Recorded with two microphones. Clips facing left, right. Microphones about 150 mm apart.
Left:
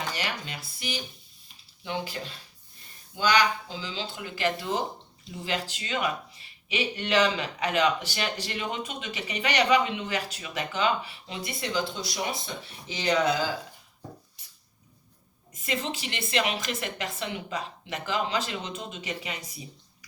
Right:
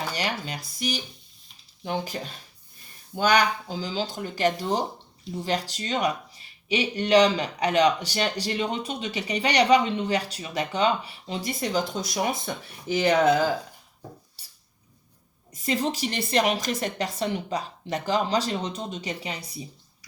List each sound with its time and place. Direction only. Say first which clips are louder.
0.2 s speech: right 4 dB; 40° right (ahead or behind)
15.6 s speech: right 6 dB; 35° right (ahead or behind)